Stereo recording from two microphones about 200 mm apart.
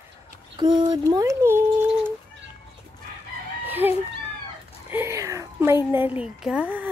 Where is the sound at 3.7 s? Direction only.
10° right (ahead or behind).